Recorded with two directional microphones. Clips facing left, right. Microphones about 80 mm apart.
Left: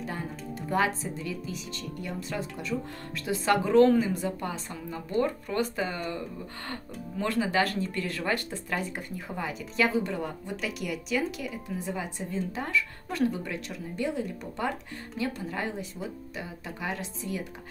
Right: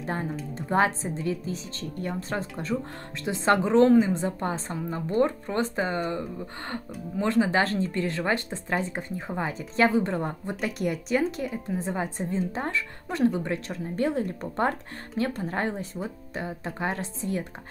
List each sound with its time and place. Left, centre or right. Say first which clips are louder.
0.0 s speech: right 5 dB; right
3.3 s a woman's voice: right 3 dB; right